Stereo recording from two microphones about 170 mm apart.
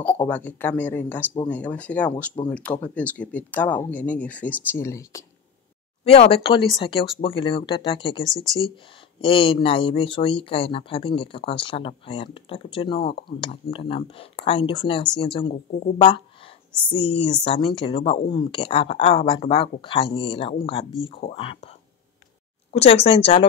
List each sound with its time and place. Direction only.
0.0 s speech: 10° left (ahead or behind)
6.0 s speech: 35° left (ahead or behind)